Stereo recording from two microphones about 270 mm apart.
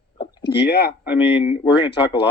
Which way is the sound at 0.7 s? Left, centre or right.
Left.